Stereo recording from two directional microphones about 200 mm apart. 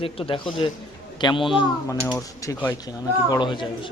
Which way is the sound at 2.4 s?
15° left (ahead or behind).